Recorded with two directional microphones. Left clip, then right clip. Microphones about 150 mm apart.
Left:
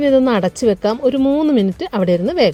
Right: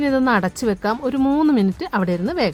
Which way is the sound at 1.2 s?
Centre (ahead or behind).